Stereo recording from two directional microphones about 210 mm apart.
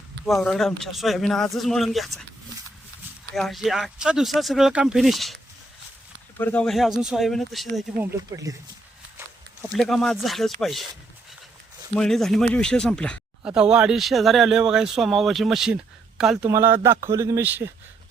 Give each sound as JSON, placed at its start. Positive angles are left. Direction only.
{"t": 0.4, "sound": "speech", "side_deg": 0}
{"t": 3.3, "sound": "speech", "side_deg": 0}
{"t": 6.4, "sound": "speech", "side_deg": 5}
{"t": 8.3, "sound": "a man's voice", "side_deg": -20}
{"t": 9.7, "sound": "speech", "side_deg": 0}
{"t": 11.9, "sound": "speech", "side_deg": 0}
{"t": 16.5, "sound": "a man's voice", "side_deg": -15}